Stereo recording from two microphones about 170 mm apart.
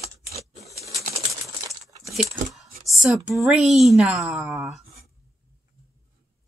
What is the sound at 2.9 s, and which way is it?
Speech, centre (ahead or behind).